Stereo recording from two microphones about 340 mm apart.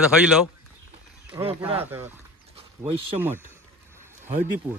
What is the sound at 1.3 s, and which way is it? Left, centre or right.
Speech, centre.